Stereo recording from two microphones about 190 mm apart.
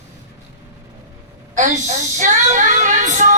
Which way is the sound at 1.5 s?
40° right (ahead or behind).